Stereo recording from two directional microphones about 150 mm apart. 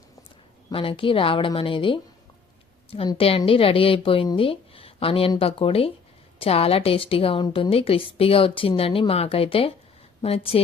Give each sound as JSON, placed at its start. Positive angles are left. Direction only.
{"t": 0.7, "sound": "a woman's voice", "side_deg": 35}